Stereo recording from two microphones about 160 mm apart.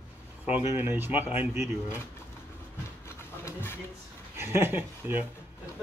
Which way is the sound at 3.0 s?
15° left (ahead or behind).